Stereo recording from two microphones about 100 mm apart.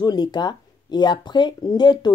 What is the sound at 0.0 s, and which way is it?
Speech, 45° left (ahead or behind).